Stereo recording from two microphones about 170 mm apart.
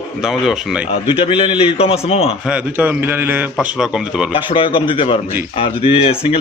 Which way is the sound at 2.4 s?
5° right (ahead or behind).